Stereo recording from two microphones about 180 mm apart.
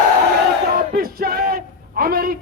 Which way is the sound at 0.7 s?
55° right (ahead or behind).